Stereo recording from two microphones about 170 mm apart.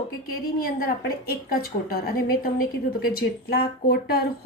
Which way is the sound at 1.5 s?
65° left (ahead or behind).